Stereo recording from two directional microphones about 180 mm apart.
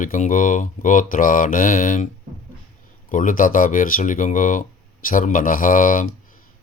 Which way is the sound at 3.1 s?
45° left (ahead or behind).